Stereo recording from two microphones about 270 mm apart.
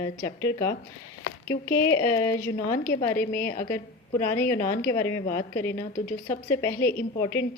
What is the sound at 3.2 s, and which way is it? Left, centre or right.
Speech, left.